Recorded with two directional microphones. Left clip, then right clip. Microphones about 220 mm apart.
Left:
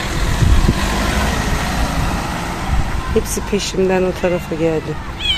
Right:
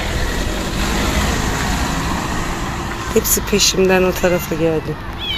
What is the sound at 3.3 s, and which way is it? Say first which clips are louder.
Speech: right 5 dB; centre (ahead or behind).